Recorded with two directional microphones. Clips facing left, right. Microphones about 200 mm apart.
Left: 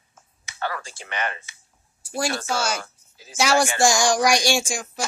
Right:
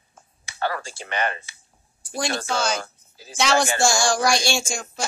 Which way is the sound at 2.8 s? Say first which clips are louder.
Right 3 dB; 35° right (ahead or behind).